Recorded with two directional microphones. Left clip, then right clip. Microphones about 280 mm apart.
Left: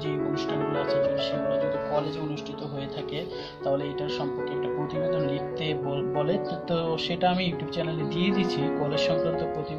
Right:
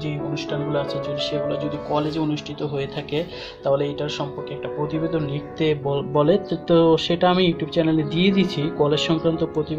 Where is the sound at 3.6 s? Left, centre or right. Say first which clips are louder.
Right 6 dB; right.